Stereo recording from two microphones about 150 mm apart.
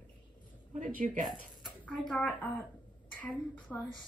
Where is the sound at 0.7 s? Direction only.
55° right (ahead or behind).